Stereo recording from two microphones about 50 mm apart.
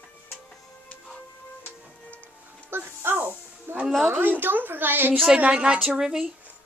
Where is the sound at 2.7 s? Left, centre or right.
Right.